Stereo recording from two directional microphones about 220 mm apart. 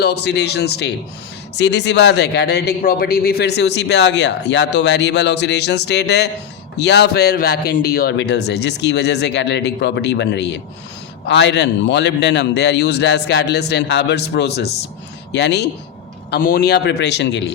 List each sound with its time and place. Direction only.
0.0 s speech: 50° left (ahead or behind)